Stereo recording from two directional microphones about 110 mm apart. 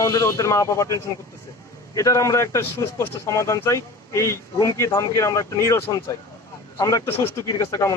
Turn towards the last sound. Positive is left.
turn(degrees=30)  # may be behind; listen again after turning